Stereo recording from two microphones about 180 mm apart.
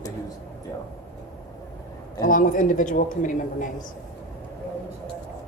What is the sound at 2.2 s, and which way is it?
A man's voice, 50° left (ahead or behind).